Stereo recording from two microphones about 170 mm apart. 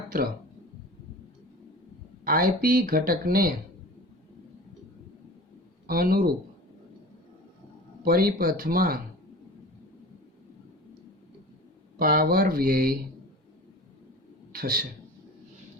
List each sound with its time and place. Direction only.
2.2 s speech: 55° right (ahead or behind)
5.9 s speech: 60° right (ahead or behind)
8.0 s speech: 60° right (ahead or behind)
11.9 s speech: 60° right (ahead or behind)
14.5 s speech: 60° right (ahead or behind)